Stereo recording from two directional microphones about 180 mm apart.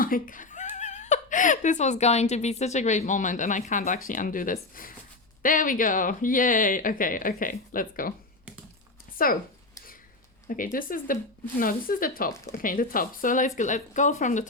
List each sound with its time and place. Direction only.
0.0 s a woman's voice: 50° left (ahead or behind)
9.1 s speech: 50° left (ahead or behind)
10.5 s speech: 50° left (ahead or behind)